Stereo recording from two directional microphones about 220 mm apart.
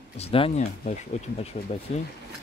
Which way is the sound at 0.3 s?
25° left (ahead or behind).